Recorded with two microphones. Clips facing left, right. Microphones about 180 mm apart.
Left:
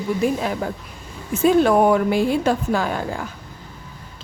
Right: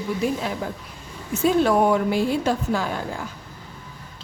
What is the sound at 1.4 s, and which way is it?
A woman's voice, 55° left (ahead or behind).